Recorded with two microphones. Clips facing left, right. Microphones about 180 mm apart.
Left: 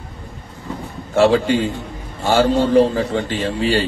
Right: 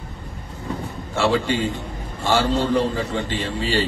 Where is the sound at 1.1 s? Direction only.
50° left (ahead or behind).